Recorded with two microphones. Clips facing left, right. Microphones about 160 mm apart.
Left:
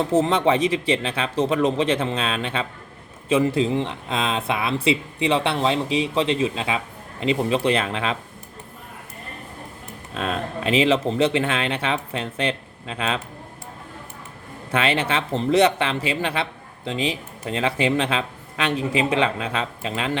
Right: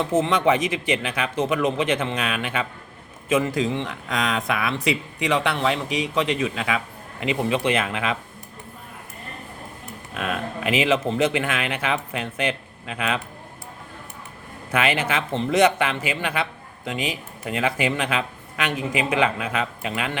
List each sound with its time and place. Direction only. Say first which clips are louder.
0.0 s speech: left 1 dB; 35° left (ahead or behind)
10.2 s speech: left 1 dB; 30° left (ahead or behind)
14.7 s speech: left 1 dB; 30° left (ahead or behind)